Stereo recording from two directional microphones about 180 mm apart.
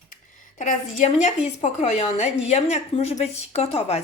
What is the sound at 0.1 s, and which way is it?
Speech, 45° left (ahead or behind).